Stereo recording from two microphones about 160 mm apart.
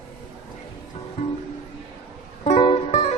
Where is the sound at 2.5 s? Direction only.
35° left (ahead or behind).